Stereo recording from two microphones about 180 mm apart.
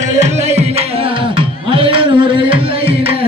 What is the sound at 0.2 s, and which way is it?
Music, 35° right (ahead or behind).